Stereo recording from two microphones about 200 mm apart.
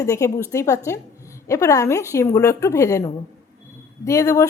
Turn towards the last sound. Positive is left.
turn(degrees=15)  # may be behind; listen again after turning